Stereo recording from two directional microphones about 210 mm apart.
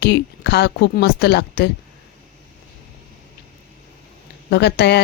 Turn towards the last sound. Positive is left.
turn(degrees=55)  # may be behind; listen again after turning